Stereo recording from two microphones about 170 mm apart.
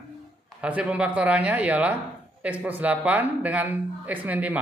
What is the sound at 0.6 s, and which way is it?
Speech, 5° right (ahead or behind).